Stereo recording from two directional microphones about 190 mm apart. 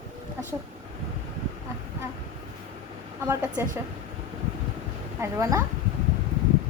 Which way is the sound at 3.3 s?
10° right (ahead or behind).